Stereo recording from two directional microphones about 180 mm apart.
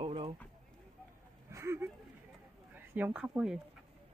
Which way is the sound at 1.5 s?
15° right (ahead or behind).